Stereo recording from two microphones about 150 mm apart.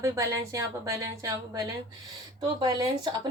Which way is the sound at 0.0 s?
20° right (ahead or behind).